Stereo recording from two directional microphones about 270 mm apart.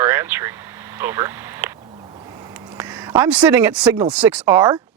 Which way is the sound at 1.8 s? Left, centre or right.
Centre.